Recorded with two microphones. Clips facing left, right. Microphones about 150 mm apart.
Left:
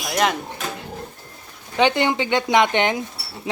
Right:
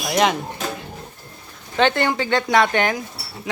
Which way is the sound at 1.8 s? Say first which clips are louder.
Even; 15° left (ahead or behind).